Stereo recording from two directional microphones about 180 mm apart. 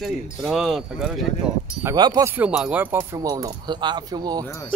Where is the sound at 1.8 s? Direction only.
20° right (ahead or behind).